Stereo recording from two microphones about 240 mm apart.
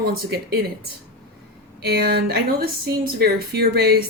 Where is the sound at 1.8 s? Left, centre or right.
Right.